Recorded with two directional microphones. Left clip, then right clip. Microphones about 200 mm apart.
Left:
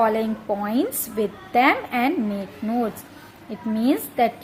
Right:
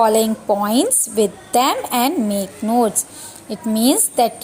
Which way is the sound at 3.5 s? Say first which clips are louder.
Right 5 dB; 25° right (ahead or behind).